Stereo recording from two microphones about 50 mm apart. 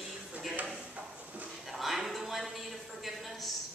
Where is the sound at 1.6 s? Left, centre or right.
Centre.